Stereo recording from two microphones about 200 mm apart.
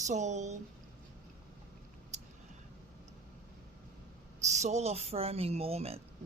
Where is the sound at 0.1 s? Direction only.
35° right (ahead or behind).